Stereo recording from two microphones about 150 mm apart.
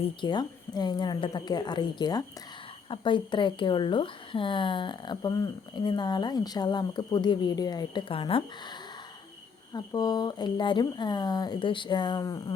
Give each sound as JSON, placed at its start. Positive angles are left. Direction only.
{"t": 0.0, "sound": "speech", "side_deg": 30}